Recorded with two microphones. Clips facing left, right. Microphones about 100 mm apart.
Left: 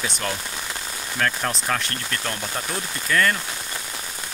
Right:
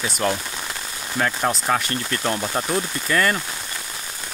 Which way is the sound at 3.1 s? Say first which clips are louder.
Even; 5° right (ahead or behind).